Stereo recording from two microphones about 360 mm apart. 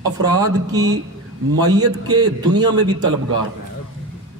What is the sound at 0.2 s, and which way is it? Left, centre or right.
A man's voice, centre.